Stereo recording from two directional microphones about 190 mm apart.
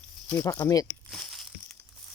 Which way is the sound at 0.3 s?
10° left (ahead or behind).